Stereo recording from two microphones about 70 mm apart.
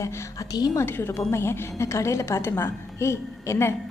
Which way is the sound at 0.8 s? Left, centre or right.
Left.